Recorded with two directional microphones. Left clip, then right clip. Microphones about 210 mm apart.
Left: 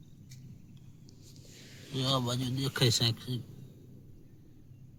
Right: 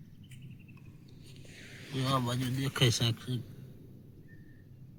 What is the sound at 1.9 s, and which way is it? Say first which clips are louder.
Speech: left 1 dB; 15° left (ahead or behind).